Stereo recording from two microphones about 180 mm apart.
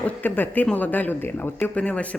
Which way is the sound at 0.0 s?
10° left (ahead or behind).